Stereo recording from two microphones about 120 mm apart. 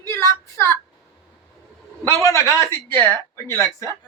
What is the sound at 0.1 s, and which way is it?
Speech, 20° left (ahead or behind).